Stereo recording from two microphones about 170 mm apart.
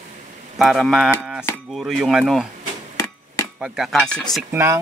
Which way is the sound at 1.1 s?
5° right (ahead or behind).